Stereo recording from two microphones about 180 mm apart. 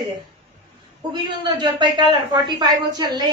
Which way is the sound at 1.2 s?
25° right (ahead or behind).